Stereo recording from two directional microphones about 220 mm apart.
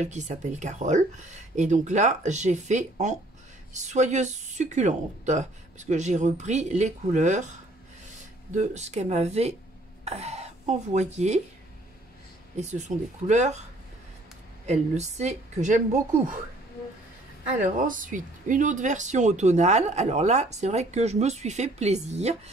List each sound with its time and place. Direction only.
0.0 s speech: 35° right (ahead or behind)
8.5 s speech: 30° right (ahead or behind)
12.5 s speech: 30° right (ahead or behind)
14.7 s speech: 30° right (ahead or behind)
17.6 s speech: 35° right (ahead or behind)